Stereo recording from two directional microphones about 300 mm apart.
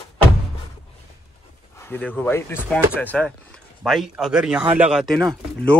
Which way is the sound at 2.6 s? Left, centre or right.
Centre.